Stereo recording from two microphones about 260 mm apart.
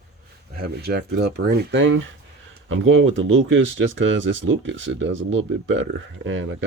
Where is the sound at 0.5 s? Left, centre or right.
Right.